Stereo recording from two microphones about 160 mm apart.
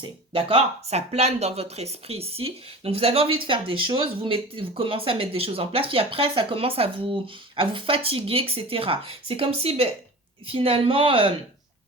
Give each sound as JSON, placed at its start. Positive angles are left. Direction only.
{"t": 0.0, "sound": "speech", "side_deg": -35}